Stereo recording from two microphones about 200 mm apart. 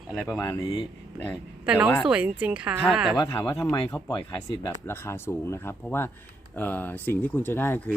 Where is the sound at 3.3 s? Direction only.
10° left (ahead or behind).